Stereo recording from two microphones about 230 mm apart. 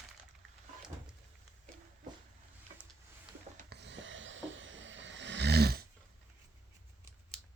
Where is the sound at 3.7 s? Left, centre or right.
Right.